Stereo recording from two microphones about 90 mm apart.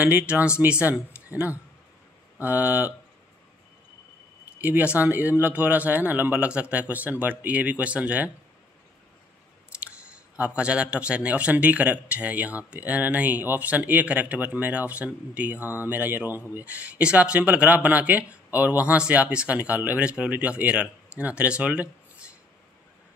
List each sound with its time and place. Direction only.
0.0 s a man's voice: 15° right (ahead or behind)
4.6 s a man's voice: 20° right (ahead or behind)
9.8 s a man's voice: 15° right (ahead or behind)